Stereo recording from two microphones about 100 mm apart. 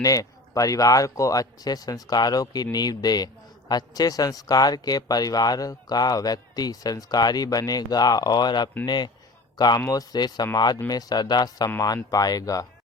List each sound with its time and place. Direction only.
0.0 s speech: 35° left (ahead or behind)